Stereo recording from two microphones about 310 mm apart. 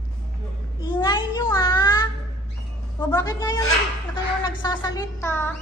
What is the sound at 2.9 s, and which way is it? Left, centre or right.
Speech, centre.